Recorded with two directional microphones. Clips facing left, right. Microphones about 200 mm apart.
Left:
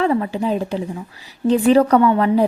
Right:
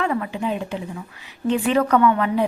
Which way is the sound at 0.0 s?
30° left (ahead or behind).